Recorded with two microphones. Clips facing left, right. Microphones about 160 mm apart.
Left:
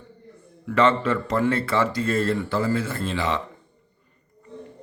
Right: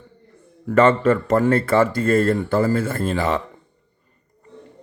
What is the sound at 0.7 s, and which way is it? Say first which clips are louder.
Speech: right 5 dB; 50° right (ahead or behind).